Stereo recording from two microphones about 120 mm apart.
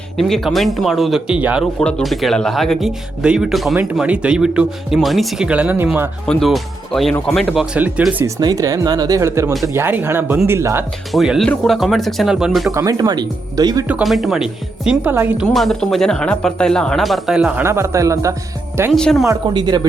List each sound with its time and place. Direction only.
0.2 s speech: centre (ahead or behind)
1.8 s speech: 5° left (ahead or behind); by 6.1 s 15° right (ahead or behind)
6.2 s speech: 5° left (ahead or behind)
8.4 s speech: 35° right (ahead or behind)
9.5 s speech: centre (ahead or behind)
9.7 s speech: 20° right (ahead or behind)
11.1 s speech: centre (ahead or behind)
12.7 s speech: 30° right (ahead or behind)
14.0 s speech: centre (ahead or behind)
17.7 s speech: 25° right (ahead or behind)
18.9 s speech: 5° left (ahead or behind)
19.5 s speech: 40° right (ahead or behind)